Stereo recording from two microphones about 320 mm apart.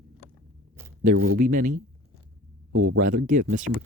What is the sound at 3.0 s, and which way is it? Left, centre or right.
Speech, right.